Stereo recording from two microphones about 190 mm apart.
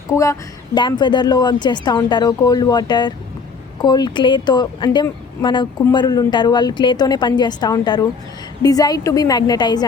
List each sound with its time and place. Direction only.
0.1 s speech: 15° left (ahead or behind)